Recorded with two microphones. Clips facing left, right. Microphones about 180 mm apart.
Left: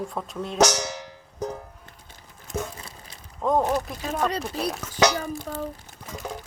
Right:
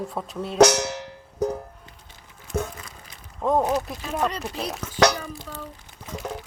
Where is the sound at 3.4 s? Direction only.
Centre (ahead or behind).